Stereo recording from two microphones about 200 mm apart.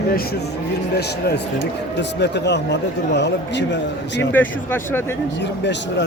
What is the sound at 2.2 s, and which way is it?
A man's voice, 60° left (ahead or behind).